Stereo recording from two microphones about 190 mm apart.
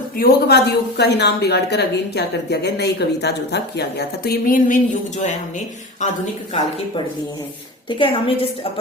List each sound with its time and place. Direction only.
0.2 s a woman's voice: 55° left (ahead or behind); by 5.4 s 40° left (ahead or behind)
7.9 s a woman's voice: 25° left (ahead or behind)